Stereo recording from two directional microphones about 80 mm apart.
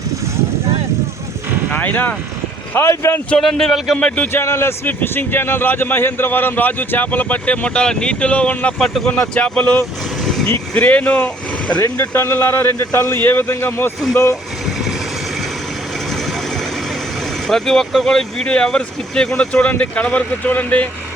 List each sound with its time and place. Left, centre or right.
1.7 s speech: left
2.7 s a man's voice: left
3.4 s a man's voice: centre
3.9 s speech: centre
11.8 s a man's voice: left
17.5 s speech: centre